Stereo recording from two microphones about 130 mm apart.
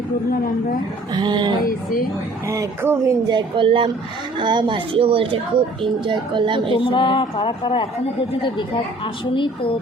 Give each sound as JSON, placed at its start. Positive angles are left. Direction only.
{"t": 1.1, "sound": "a woman's voice", "side_deg": -35}
{"t": 1.6, "sound": "speech", "side_deg": 90}
{"t": 2.5, "sound": "speech", "side_deg": -20}
{"t": 3.2, "sound": "a woman's voice", "side_deg": -40}
{"t": 6.7, "sound": "a woman's voice", "side_deg": 40}
{"t": 9.3, "sound": "a woman's voice", "side_deg": 40}